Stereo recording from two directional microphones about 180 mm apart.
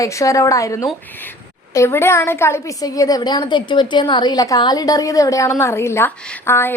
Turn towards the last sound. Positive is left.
turn(degrees=10)  # may be behind; listen again after turning